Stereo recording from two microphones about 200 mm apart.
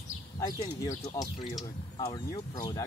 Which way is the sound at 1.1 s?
20° left (ahead or behind).